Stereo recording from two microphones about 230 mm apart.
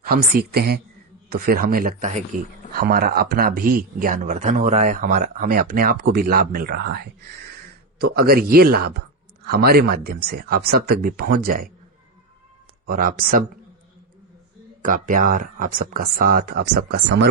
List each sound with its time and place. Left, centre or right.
0.0 s speech: right
12.9 s speech: right
14.8 s speech: right